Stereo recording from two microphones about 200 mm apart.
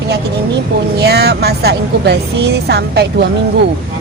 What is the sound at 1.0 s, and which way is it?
A woman's voice, 55° right (ahead or behind).